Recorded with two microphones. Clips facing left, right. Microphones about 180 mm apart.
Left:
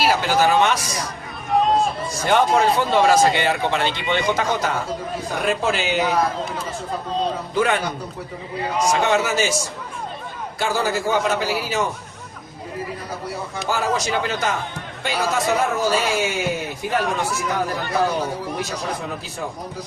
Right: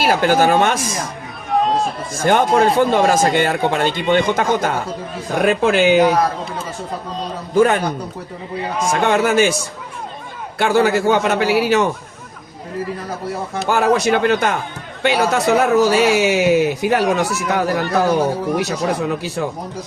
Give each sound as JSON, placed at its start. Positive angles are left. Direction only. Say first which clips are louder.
{"t": 0.0, "sound": "speech", "louder": "right 4 dB", "side_deg": -50}
{"t": 1.5, "sound": "a sound", "louder": "right 1 dB", "side_deg": 0}
{"t": 2.1, "sound": "speech", "louder": "right 4 dB", "side_deg": -50}
{"t": 7.5, "sound": "speech", "louder": "right 8 dB", "side_deg": -45}
{"t": 8.8, "sound": "speech", "louder": "right 3 dB", "side_deg": -50}
{"t": 10.6, "sound": "a man's voice", "louder": "right 7 dB", "side_deg": -65}
{"t": 13.7, "sound": "a man's voice", "louder": "right 8 dB", "side_deg": -60}